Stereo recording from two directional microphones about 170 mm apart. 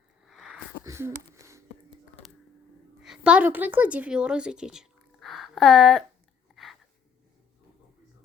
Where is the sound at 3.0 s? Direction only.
5° right (ahead or behind).